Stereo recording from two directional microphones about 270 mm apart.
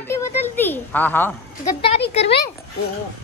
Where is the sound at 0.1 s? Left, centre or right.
Centre.